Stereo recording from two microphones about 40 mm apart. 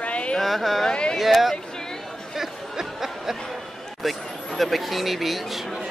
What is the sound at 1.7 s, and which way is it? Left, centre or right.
Chatter, centre.